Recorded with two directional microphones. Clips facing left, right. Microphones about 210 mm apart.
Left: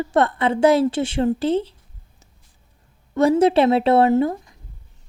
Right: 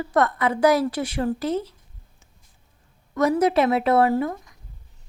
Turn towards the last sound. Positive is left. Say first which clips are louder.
# left 5 dB
turn(degrees=30)  # may be behind; listen again after turning